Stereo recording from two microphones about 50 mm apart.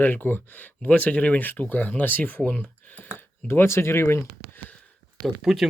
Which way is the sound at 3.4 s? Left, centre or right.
Left.